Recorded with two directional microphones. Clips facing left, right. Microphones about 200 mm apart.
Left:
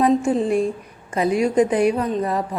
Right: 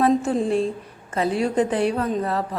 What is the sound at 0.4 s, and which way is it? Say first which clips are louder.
A woman's voice: left 2 dB; 15° left (ahead or behind).